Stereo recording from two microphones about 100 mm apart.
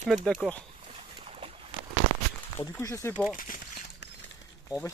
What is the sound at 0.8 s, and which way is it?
Rodents, 85° right.